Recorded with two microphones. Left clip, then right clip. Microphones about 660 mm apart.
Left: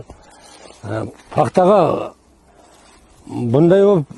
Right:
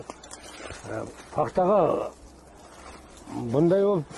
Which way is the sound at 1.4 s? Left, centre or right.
Left.